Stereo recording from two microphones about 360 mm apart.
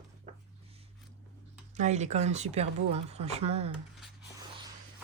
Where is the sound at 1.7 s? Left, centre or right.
Centre.